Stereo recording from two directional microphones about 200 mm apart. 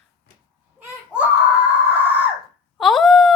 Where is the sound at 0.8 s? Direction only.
5° right (ahead or behind).